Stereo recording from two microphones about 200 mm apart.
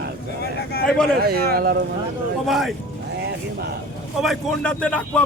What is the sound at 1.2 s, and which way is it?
Speech, 50° right (ahead or behind).